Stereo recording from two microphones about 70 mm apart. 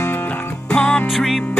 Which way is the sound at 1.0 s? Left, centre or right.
Centre.